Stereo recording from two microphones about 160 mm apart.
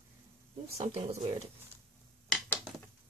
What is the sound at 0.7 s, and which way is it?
Speech, 40° right (ahead or behind).